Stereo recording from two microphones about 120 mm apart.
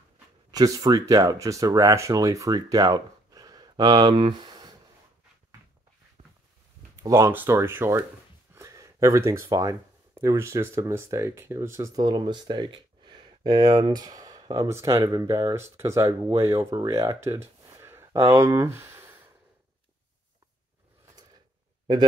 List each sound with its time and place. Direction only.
0.5 s speech: 30° right (ahead or behind)
7.0 s speech: 25° right (ahead or behind)
12.0 s speech: 35° right (ahead or behind)
16.8 s a sound: 25° right (ahead or behind)
18.2 s speech: 30° right (ahead or behind)